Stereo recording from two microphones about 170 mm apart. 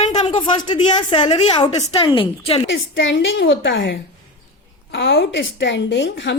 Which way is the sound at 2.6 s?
90° left.